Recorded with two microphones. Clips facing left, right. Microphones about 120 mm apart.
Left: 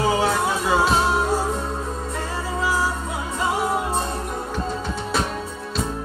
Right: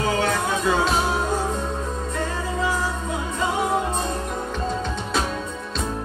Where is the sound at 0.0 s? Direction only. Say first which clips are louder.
Left 2 dB; 10° left (ahead or behind).